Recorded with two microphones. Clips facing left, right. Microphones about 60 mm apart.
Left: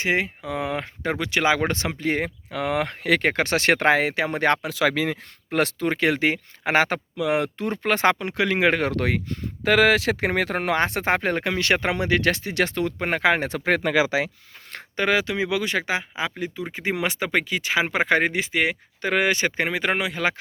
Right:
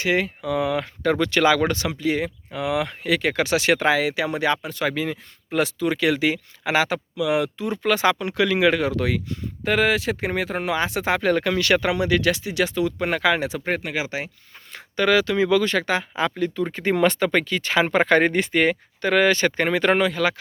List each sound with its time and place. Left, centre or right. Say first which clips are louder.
0.0 s speech: right 1 dB; left
2.0 s speech: right 1 dB; left
4.7 s speech: left 2 dB; left
8.8 s speech: right 1 dB; left
9.6 s speech: left 2 dB; left
13.0 s speech: left 1 dB; left
14.9 s speech: right 3 dB; left; by 18.8 s centre
19.0 s speech: right 3 dB; centre